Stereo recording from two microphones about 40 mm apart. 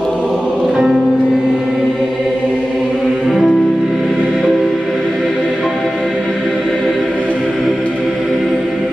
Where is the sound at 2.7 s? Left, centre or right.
Centre.